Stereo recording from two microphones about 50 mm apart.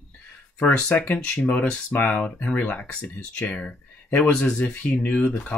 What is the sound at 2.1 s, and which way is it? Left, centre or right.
Speech, left.